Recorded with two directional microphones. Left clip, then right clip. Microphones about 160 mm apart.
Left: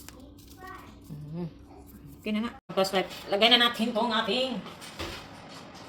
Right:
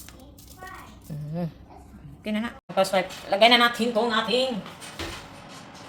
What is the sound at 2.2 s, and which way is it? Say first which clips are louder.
A woman's voice: right 2 dB; 20° right (ahead or behind).